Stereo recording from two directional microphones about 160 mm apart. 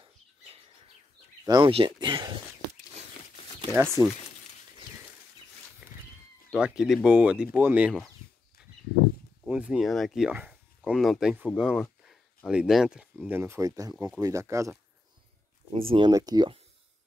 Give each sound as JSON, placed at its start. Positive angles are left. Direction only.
{"t": 1.4, "sound": "speech", "side_deg": -30}
{"t": 3.7, "sound": "speech", "side_deg": -15}
{"t": 5.8, "sound": "cat", "side_deg": -10}
{"t": 6.5, "sound": "speech", "side_deg": -5}
{"t": 9.5, "sound": "speech", "side_deg": -5}
{"t": 15.7, "sound": "speech", "side_deg": -35}
{"t": 16.1, "sound": "speech", "side_deg": -25}